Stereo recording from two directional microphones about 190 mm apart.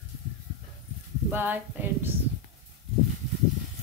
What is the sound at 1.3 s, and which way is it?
Speech, 10° right (ahead or behind).